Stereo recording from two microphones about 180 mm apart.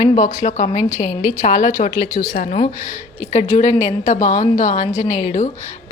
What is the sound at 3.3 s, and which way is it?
Speech, 40° left (ahead or behind).